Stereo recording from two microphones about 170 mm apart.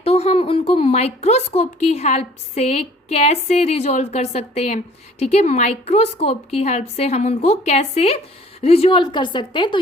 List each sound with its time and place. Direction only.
0.0 s speech: 35° left (ahead or behind)